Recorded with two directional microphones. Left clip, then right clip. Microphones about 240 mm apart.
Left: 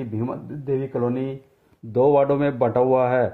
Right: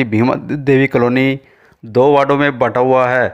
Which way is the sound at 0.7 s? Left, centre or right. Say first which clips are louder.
Right 11 dB; right.